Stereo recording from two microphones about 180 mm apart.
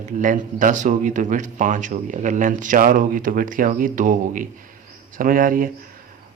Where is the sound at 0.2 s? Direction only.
45° right (ahead or behind).